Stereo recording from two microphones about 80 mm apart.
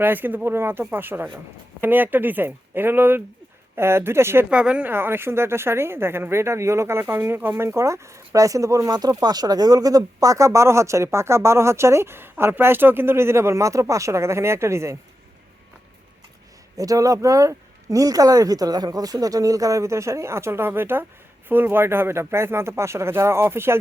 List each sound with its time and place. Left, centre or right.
0.0 s speech: right
4.4 s a woman's voice: centre
4.9 s speech: right
16.7 s speech: right